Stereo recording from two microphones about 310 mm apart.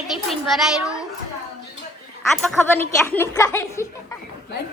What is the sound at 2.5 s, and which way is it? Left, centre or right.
A woman's voice, centre.